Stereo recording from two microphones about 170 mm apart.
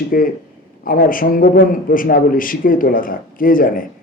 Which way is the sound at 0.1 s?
55° left (ahead or behind).